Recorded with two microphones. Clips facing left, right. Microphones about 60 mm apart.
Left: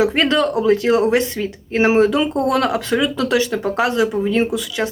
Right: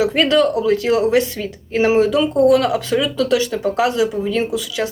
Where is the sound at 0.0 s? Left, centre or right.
Left.